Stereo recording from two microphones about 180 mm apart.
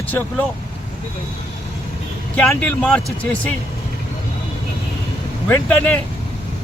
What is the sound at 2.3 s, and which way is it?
Speech, 10° left (ahead or behind).